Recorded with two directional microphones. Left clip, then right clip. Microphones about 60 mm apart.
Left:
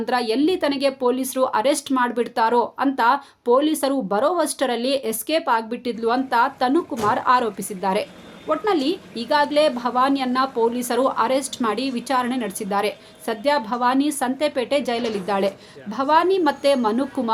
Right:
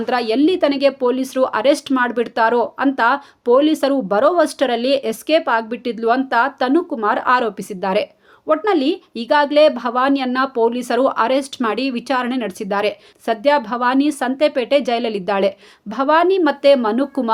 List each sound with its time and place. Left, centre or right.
0.0 s a woman's voice: right
15.9 s a woman's voice: right